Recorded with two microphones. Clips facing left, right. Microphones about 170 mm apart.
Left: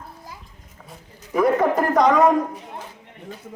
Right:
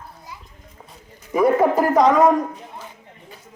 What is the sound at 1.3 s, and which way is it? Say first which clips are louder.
A man's voice: right 2 dB; 5° right (ahead or behind).